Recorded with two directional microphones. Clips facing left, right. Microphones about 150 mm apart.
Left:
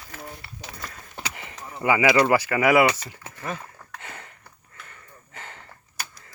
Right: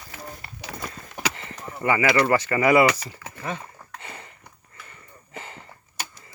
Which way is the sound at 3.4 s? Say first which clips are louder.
Right 1 dB; centre (ahead or behind).